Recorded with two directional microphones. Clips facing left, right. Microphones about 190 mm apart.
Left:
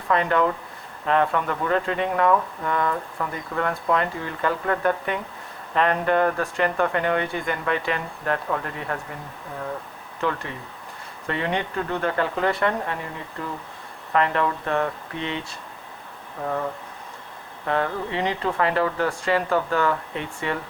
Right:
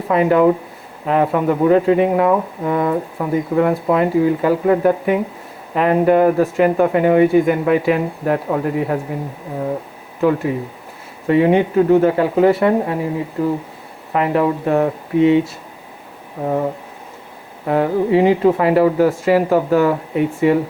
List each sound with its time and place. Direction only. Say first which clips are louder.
0.1 s speech: right 8 dB; 10° right (ahead or behind)
10.2 s speech: right 11 dB; 5° right (ahead or behind)
16.4 s speech: right 8 dB; 25° right (ahead or behind)
17.7 s speech: right 10 dB; 15° right (ahead or behind)